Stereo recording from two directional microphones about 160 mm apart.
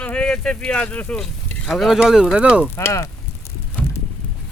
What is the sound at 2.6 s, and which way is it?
Bicycle, 15° left (ahead or behind).